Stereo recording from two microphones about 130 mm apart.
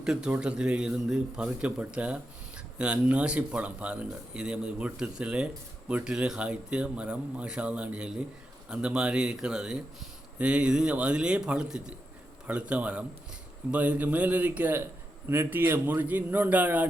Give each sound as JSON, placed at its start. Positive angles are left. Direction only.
{"t": 0.0, "sound": "speech", "side_deg": -5}